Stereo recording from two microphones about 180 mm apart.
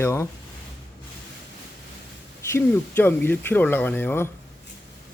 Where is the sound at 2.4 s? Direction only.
10° left (ahead or behind).